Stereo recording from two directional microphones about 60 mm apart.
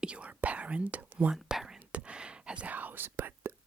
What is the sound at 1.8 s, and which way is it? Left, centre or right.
Whispering, centre.